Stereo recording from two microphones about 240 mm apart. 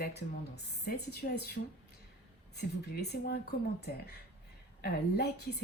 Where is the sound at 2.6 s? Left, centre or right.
Left.